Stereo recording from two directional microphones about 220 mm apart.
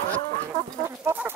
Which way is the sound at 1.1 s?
10° right (ahead or behind).